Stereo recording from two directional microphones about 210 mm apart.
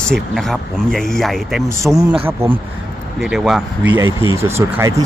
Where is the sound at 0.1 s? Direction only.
Centre (ahead or behind).